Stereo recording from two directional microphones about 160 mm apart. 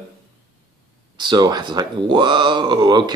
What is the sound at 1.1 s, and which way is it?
Speech, 25° right (ahead or behind).